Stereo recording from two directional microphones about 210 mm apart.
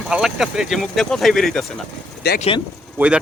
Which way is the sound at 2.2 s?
50° left (ahead or behind).